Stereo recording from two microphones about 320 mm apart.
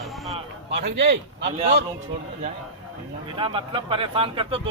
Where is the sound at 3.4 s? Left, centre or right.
Centre.